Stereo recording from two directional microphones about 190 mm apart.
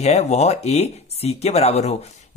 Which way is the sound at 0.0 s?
35° left (ahead or behind).